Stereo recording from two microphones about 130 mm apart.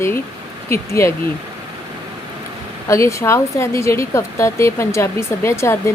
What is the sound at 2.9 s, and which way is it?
A woman's voice, 25° left (ahead or behind).